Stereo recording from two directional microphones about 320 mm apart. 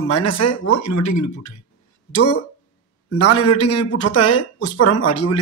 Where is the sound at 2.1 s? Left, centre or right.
Left.